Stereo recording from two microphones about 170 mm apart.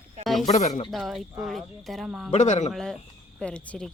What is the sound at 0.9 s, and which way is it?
Speech, centre (ahead or behind).